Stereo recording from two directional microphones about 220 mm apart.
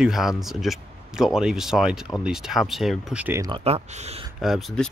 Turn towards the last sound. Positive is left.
turn(degrees=0)  # may be behind; listen again after turning